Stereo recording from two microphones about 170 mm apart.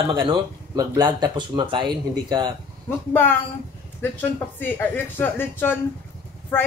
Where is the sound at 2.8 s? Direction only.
10° left (ahead or behind).